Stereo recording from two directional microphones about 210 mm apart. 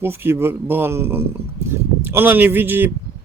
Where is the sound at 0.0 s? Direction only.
10° right (ahead or behind).